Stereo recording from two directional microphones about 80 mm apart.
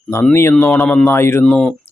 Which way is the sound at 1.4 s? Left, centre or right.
Centre.